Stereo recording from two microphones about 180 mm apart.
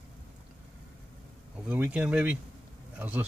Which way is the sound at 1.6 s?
5° right (ahead or behind).